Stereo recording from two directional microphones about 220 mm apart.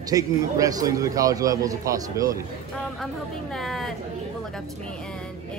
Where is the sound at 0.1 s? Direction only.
15° right (ahead or behind).